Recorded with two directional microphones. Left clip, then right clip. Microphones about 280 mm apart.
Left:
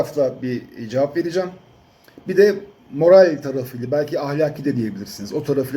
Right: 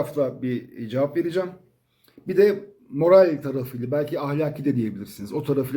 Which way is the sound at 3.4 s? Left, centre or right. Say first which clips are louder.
Left 4 dB; centre.